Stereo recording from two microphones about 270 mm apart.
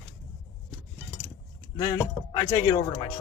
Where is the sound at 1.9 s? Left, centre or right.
Centre.